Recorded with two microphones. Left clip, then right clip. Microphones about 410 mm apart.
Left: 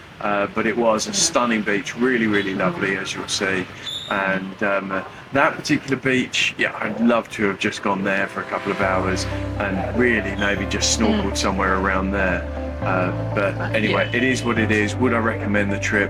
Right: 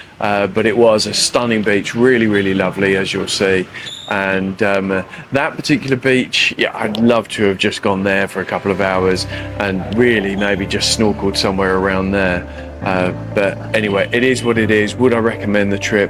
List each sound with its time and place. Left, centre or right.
0.3 s speech: right